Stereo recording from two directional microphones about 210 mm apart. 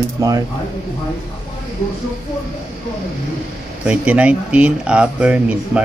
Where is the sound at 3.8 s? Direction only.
5° right (ahead or behind).